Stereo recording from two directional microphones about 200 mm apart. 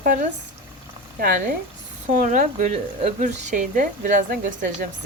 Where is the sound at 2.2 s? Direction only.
40° right (ahead or behind).